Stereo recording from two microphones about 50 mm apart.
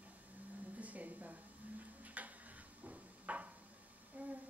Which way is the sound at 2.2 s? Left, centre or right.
Right.